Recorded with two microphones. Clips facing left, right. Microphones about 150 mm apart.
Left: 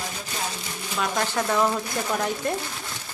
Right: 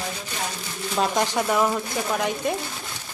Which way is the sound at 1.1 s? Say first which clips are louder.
Left 1 dB; 15° right (ahead or behind).